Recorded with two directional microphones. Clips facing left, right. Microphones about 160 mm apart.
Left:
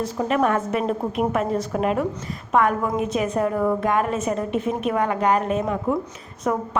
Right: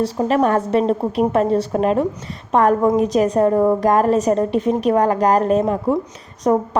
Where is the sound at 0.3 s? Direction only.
35° right (ahead or behind).